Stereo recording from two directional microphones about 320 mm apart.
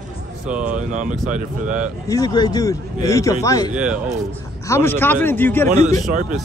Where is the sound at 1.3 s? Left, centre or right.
Centre.